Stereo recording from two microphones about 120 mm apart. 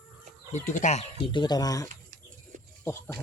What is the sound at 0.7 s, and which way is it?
Speech, 80° left.